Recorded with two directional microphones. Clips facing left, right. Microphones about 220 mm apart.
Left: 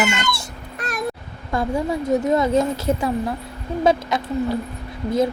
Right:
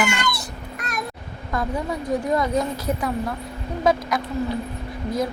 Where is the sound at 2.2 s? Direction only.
25° left (ahead or behind).